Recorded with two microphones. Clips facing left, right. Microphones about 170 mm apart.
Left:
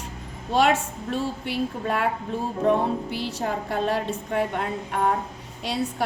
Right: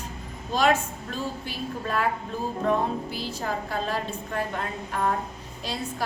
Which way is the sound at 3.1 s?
70° left (ahead or behind).